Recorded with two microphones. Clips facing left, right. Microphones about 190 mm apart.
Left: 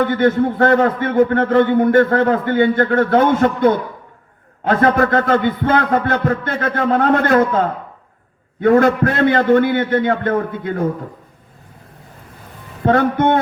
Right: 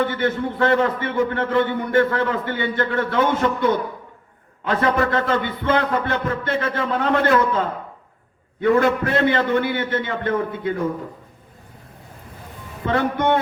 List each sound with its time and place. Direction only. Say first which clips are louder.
0.0 s a man's voice: left 7 dB; 45° left (ahead or behind)
12.8 s a man's voice: left 6 dB; 50° left (ahead or behind)